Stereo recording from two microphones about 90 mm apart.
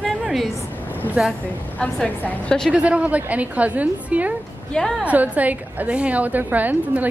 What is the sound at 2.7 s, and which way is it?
A woman's voice, 15° right (ahead or behind).